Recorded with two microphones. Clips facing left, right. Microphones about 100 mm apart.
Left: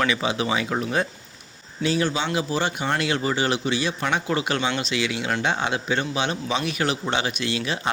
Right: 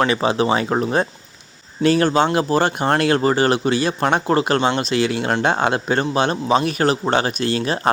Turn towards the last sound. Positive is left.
turn(degrees=-40)  # may be behind; listen again after turning